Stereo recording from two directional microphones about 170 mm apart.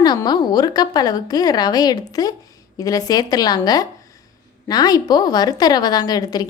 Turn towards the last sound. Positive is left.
turn(degrees=25)  # may be behind; listen again after turning